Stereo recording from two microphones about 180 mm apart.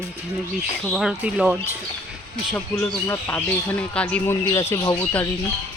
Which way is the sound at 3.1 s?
10° left (ahead or behind).